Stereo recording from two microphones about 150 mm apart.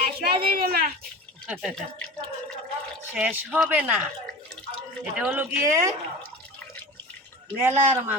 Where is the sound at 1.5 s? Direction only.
Centre (ahead or behind).